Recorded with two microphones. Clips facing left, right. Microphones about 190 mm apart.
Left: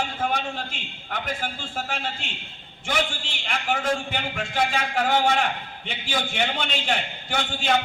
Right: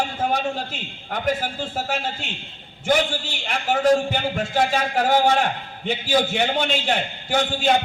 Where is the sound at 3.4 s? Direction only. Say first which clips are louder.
Right 6 dB; 40° right (ahead or behind).